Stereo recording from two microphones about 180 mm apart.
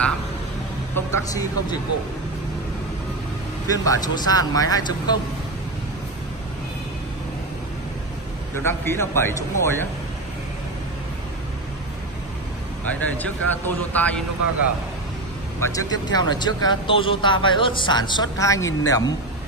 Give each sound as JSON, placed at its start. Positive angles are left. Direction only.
{"t": 0.9, "sound": "a man's voice", "side_deg": 15}
{"t": 3.7, "sound": "speech", "side_deg": 20}
{"t": 8.5, "sound": "a man's voice", "side_deg": 15}
{"t": 12.8, "sound": "a man's voice", "side_deg": 10}
{"t": 15.6, "sound": "speech", "side_deg": 20}